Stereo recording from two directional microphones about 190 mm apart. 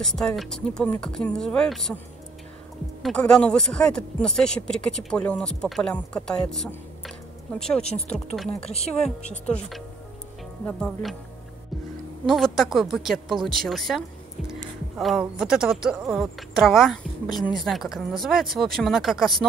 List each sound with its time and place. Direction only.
0.0 s speech: centre (ahead or behind)
3.0 s speech: 5° left (ahead or behind)
8.5 s speech: 35° left (ahead or behind)
9.5 s speech: centre (ahead or behind)
12.3 s speech: centre (ahead or behind)